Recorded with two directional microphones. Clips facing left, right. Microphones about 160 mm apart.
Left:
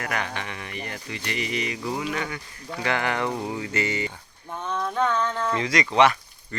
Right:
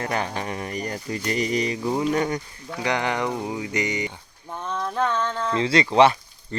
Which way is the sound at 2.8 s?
20° right (ahead or behind).